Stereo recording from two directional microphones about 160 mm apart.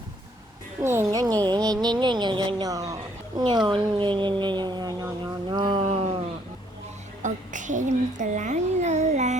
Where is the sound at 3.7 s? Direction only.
30° right (ahead or behind).